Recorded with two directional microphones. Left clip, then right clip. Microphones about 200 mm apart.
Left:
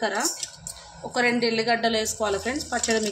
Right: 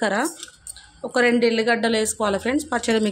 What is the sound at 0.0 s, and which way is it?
Speech, 55° right (ahead or behind).